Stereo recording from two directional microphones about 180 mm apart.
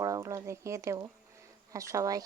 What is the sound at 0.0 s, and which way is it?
Speech, 15° right (ahead or behind).